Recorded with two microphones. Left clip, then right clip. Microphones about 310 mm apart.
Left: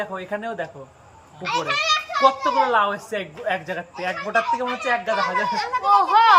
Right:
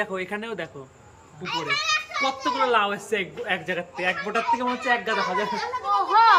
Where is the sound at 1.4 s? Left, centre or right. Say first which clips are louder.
Left 4 dB; centre.